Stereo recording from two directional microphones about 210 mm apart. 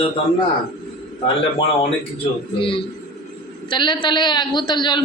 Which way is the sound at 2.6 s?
25° left (ahead or behind).